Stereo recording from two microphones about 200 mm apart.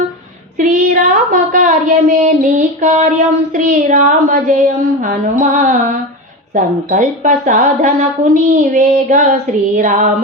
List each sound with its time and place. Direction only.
0.6 s child singing: 40° right (ahead or behind)
3.5 s a woman's voice: 40° right (ahead or behind)